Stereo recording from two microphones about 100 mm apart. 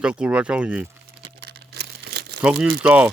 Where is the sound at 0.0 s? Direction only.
10° right (ahead or behind).